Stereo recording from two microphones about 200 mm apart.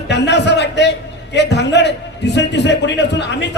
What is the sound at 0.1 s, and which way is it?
A man's voice, 60° left (ahead or behind).